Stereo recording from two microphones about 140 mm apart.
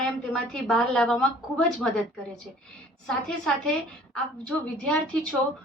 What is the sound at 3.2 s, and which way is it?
A woman's voice, 5° left (ahead or behind).